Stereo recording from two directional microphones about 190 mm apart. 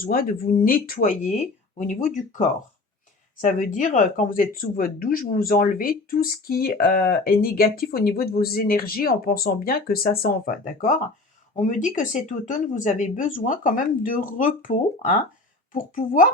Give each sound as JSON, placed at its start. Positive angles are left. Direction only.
{"t": 0.0, "sound": "speech", "side_deg": 50}